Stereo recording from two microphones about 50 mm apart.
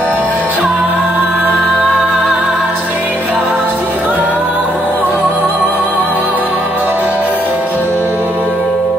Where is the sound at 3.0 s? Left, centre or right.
Left.